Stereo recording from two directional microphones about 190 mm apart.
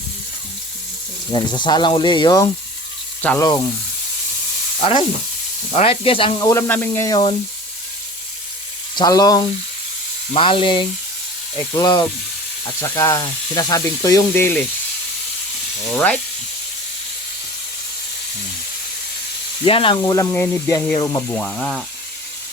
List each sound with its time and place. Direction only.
1.3 s speech: 25° left (ahead or behind)
3.2 s speech: 10° left (ahead or behind)
4.8 s sizzle: 30° left (ahead or behind)
5.7 s speech: 30° left (ahead or behind)
6.5 s speech: 10° left (ahead or behind)
9.0 s speech: 20° left (ahead or behind)
15.9 s speech: 5° left (ahead or behind)
19.6 s speech: 30° left (ahead or behind)
21.3 s speech: 5° left (ahead or behind)